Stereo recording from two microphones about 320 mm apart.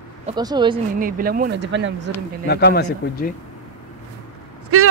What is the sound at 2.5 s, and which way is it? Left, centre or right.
Speech, left.